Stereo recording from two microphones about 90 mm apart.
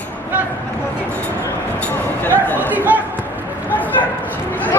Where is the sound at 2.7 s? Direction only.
20° right (ahead or behind).